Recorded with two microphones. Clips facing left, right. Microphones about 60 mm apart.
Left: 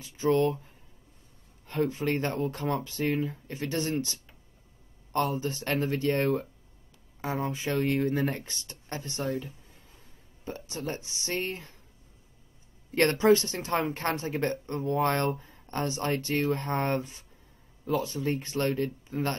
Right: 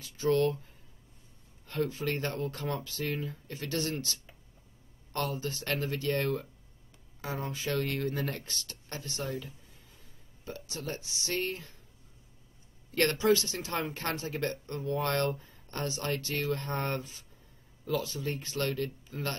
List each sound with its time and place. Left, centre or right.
0.0 s speech: left
1.7 s speech: left
12.9 s speech: left